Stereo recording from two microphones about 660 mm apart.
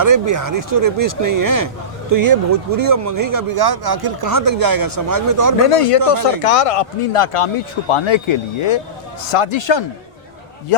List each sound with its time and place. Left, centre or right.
0.0 s speech: right
5.6 s speech: left